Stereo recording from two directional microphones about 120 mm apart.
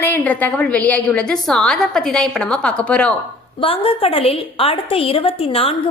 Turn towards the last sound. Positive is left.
turn(degrees=50)  # may be behind; listen again after turning